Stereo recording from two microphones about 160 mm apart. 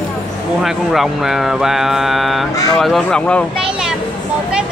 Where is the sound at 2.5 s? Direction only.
20° left (ahead or behind).